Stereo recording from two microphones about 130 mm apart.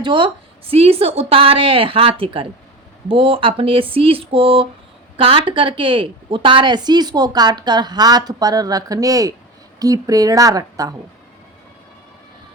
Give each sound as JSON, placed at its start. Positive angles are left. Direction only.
{"t": 0.0, "sound": "a woman's voice", "side_deg": -40}